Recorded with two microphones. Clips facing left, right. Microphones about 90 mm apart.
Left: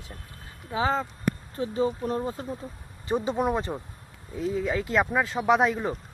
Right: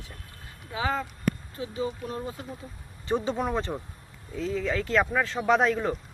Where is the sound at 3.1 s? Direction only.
5° left (ahead or behind).